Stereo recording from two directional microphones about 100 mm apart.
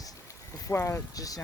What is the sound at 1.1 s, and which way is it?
Speech, 35° left (ahead or behind).